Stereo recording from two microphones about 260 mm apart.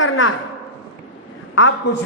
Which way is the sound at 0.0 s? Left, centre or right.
Left.